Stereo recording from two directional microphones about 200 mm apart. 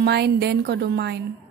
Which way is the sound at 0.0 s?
55° right (ahead or behind).